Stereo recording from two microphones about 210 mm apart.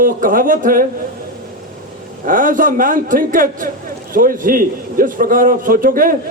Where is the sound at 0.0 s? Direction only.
40° right (ahead or behind).